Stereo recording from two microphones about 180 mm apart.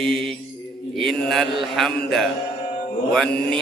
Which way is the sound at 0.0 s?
Centre (ahead or behind).